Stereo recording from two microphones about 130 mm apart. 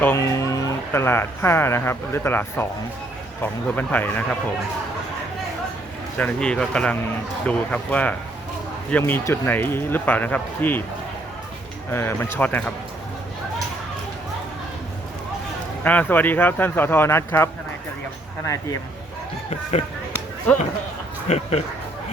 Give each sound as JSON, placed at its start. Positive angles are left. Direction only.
{"t": 0.0, "sound": "speech", "side_deg": 20}
{"t": 6.1, "sound": "speech", "side_deg": 10}
{"t": 11.9, "sound": "speech", "side_deg": 20}
{"t": 15.8, "sound": "speech", "side_deg": 15}
{"t": 21.2, "sound": "speech", "side_deg": 55}